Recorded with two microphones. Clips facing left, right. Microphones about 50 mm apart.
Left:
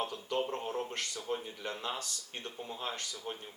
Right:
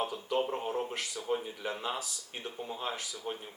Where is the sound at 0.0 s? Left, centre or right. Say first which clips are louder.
Right 3 dB; centre.